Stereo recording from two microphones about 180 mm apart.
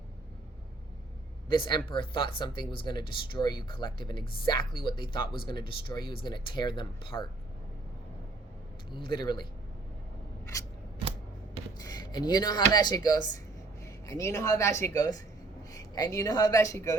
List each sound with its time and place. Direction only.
1.5 s speech: 25° left (ahead or behind)
8.9 s speech: 25° left (ahead or behind)
10.4 s scissors: 15° left (ahead or behind)
11.8 s a woman's voice: 20° left (ahead or behind)